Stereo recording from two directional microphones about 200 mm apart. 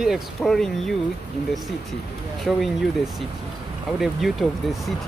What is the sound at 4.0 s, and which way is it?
Speech, centre (ahead or behind).